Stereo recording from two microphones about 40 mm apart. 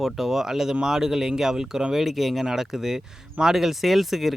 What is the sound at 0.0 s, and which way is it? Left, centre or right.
Speech, centre.